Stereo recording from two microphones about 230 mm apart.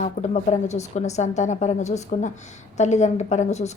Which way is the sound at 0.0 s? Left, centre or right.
Left.